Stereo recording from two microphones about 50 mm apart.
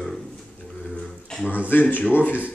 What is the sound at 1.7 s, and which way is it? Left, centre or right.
Speech, left.